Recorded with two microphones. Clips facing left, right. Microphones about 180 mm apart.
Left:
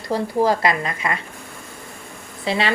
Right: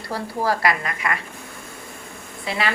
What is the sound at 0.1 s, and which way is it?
Speech, 20° left (ahead or behind).